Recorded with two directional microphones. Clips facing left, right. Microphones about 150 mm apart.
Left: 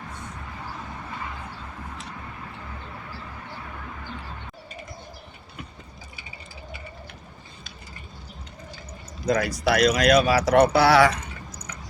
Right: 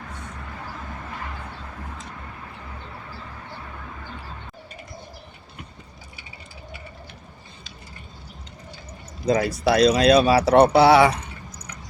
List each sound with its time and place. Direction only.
9.2 s speech: 25° right (ahead or behind)